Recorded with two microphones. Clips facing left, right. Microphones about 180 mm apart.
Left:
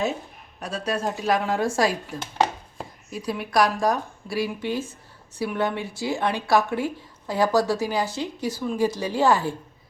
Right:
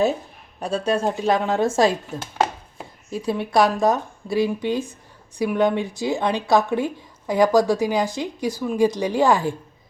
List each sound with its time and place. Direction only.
0.6 s a woman's voice: 30° right (ahead or behind)